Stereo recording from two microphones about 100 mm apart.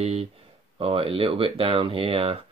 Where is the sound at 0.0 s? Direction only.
90° right.